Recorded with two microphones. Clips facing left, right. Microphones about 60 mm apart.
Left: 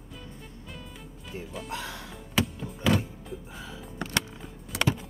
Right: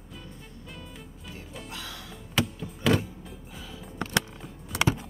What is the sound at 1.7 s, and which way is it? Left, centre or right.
Music, left.